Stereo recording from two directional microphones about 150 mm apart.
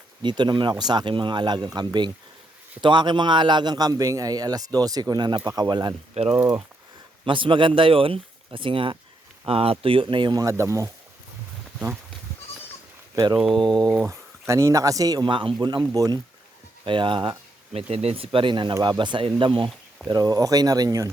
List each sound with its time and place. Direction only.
0.2 s a man's voice: 30° right (ahead or behind)
6.3 s speech: 15° right (ahead or behind)
7.3 s speech: 35° right (ahead or behind)
13.1 s a man's voice: 30° right (ahead or behind)